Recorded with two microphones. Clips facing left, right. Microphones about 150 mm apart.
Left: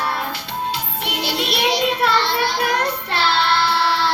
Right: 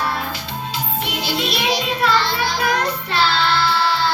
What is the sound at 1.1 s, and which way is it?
Music, 65° left (ahead or behind).